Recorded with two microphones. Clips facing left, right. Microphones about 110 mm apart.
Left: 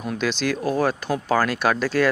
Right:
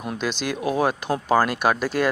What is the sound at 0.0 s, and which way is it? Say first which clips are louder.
Speech: left 3 dB; 10° right (ahead or behind).